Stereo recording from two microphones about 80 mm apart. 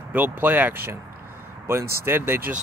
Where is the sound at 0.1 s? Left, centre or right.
Right.